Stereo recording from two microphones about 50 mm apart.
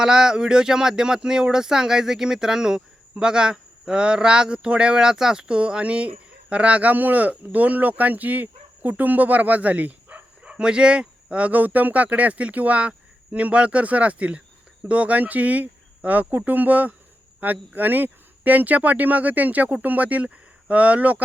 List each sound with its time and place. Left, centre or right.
0.0 s speech: centre; by 10.2 s right
10.4 s speech: centre